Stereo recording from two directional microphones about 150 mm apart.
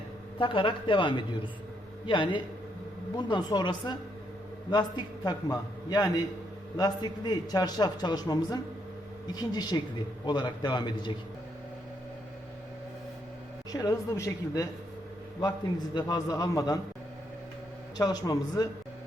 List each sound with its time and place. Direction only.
0.3 s a woman's voice: 35° left (ahead or behind)
13.7 s a man's voice: 25° left (ahead or behind)
17.9 s a man's voice: 25° left (ahead or behind)